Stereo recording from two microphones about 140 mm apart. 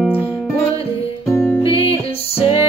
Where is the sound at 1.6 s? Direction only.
40° left (ahead or behind).